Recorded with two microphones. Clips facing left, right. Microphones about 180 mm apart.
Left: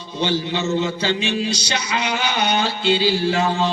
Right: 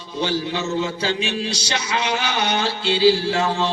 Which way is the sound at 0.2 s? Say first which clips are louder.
Left 1 dB; 20° left (ahead or behind).